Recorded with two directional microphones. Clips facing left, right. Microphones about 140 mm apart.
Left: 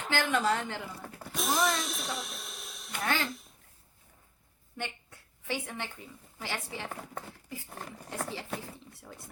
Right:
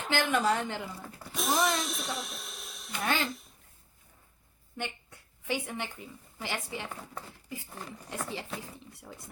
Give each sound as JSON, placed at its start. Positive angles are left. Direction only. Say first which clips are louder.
{"t": 0.1, "sound": "a woman's voice", "louder": "right 1 dB", "side_deg": -15}
{"t": 1.3, "sound": "music", "louder": "right 1 dB", "side_deg": 0}
{"t": 3.2, "sound": "speech", "louder": "right 1 dB", "side_deg": 0}
{"t": 5.5, "sound": "a woman's voice", "louder": "right 2 dB", "side_deg": -15}
{"t": 6.8, "sound": "speech", "louder": "left 1 dB", "side_deg": 55}